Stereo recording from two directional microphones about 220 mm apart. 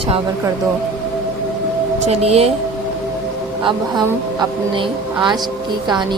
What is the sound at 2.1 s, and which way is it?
Speech, 30° right (ahead or behind).